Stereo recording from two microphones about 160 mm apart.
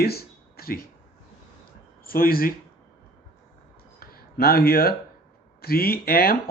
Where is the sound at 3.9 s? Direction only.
75° left (ahead or behind).